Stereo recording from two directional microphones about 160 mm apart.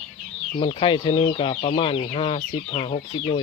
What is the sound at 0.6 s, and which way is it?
Speech, 35° left (ahead or behind).